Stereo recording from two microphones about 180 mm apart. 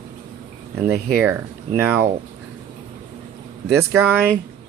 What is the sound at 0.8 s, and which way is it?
Speech, 10° right (ahead or behind).